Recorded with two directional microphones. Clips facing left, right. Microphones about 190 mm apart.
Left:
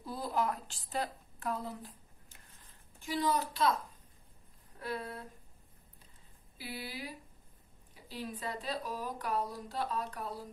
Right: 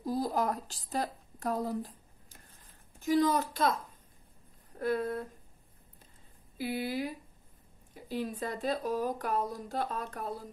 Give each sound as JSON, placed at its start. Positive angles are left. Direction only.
{"t": 0.0, "sound": "a woman's voice", "side_deg": -40}
{"t": 4.7, "sound": "speech", "side_deg": -45}
{"t": 6.6, "sound": "speech", "side_deg": -45}